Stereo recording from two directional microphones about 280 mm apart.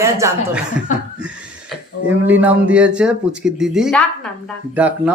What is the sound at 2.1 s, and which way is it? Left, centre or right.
Speech, centre.